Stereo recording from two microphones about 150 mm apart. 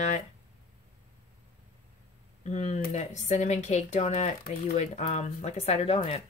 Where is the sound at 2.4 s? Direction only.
50° left (ahead or behind).